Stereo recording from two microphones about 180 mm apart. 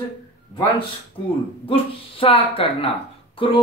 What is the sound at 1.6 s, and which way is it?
Speech, 30° left (ahead or behind).